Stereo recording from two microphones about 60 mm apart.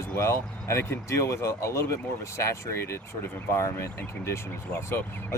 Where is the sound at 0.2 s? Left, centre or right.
Left.